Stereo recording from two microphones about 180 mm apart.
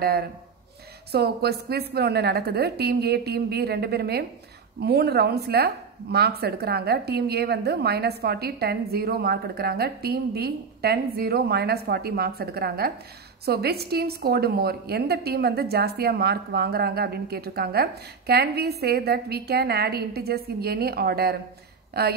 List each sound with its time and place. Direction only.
0.0 s a woman's voice: 60° right (ahead or behind)